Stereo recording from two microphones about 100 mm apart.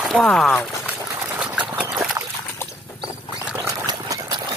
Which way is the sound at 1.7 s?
15° right (ahead or behind).